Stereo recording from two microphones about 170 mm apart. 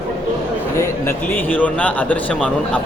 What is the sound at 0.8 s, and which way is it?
A man's voice, 10° left (ahead or behind).